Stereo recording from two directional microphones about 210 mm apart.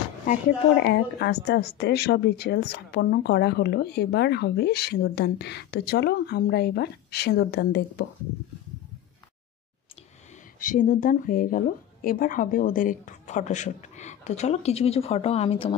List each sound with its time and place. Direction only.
0.8 s speech: 50° left (ahead or behind)
10.6 s speech: 40° left (ahead or behind)